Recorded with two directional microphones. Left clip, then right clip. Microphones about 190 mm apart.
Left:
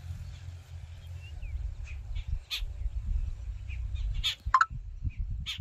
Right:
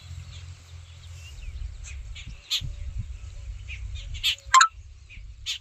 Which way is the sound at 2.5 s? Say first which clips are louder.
Right 8 dB; 20° right (ahead or behind).